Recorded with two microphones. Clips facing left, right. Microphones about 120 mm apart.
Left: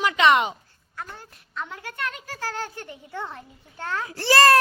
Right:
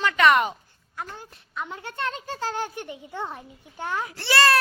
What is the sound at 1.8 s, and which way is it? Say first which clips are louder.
A child's voice: right 2 dB; 25° right (ahead or behind).